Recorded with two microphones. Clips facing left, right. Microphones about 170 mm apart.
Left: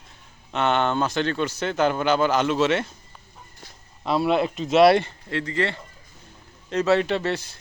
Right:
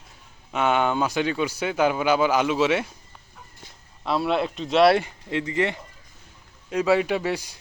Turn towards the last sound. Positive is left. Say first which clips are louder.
# even
turn(degrees=-10)  # may be behind; listen again after turning